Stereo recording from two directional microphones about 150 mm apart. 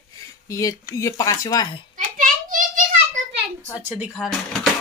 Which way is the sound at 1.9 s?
65° right (ahead or behind).